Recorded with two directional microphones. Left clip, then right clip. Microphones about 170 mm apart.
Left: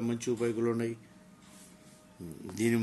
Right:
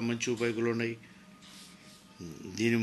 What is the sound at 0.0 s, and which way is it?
Speech, 15° left (ahead or behind).